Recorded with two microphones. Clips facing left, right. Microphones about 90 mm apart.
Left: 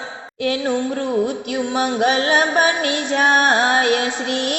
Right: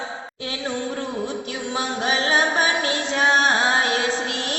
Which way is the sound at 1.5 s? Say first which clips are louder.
Left 6 dB; 55° left (ahead or behind).